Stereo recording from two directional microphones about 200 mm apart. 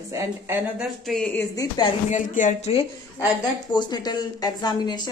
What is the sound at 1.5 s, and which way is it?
Speech, 20° left (ahead or behind).